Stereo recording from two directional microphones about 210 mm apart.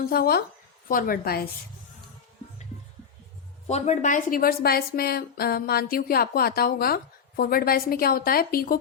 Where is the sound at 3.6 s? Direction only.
30° left (ahead or behind).